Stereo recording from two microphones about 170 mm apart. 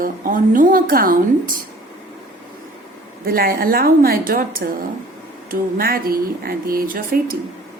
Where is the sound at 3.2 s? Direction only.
60° right (ahead or behind).